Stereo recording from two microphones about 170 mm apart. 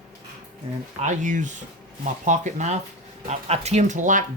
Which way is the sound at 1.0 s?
45° right (ahead or behind).